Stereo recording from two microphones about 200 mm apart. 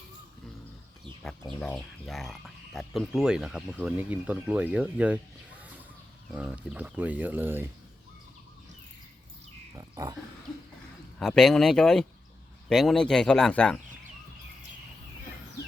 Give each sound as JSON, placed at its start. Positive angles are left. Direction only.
{"t": 1.2, "sound": "speech", "side_deg": 5}
{"t": 6.3, "sound": "speech", "side_deg": -5}
{"t": 9.7, "sound": "speech", "side_deg": -20}
{"t": 11.2, "sound": "speech", "side_deg": 0}